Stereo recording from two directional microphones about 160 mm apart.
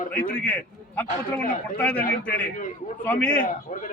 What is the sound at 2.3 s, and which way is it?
A man's voice, 55° left (ahead or behind).